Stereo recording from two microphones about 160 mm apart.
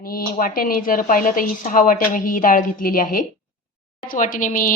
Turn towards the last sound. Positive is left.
turn(degrees=55)  # may be behind; listen again after turning